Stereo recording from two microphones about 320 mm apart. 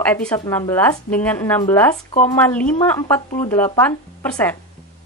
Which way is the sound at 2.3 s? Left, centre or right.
Centre.